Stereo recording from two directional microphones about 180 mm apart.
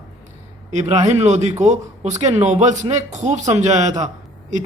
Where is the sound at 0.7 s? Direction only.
40° right (ahead or behind).